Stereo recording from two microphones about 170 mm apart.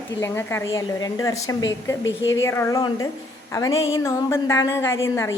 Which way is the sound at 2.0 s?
90° left.